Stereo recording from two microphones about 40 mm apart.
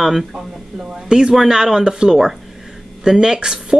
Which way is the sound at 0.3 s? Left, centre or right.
Right.